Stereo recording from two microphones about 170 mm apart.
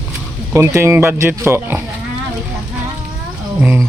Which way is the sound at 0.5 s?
15° right (ahead or behind).